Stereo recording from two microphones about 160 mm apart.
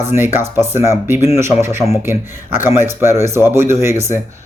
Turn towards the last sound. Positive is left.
turn(degrees=-15)  # may be behind; listen again after turning